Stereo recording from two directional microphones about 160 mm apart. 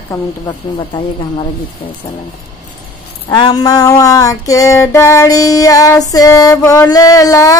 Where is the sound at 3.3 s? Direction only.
25° left (ahead or behind).